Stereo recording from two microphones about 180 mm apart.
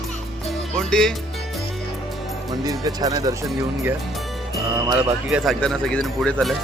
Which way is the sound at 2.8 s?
20° right (ahead or behind).